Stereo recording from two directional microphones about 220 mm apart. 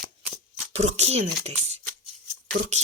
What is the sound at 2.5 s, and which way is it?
Speech, 55° right (ahead or behind).